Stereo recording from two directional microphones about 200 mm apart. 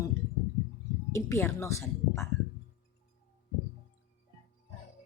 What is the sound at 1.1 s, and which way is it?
A woman's voice, 15° left (ahead or behind).